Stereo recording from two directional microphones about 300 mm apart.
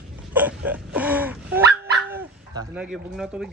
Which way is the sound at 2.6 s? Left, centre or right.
Centre.